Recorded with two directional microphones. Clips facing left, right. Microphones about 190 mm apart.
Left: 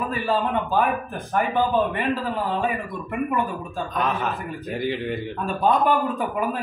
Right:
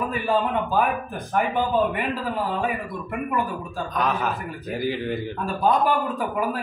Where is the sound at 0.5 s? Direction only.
Centre (ahead or behind).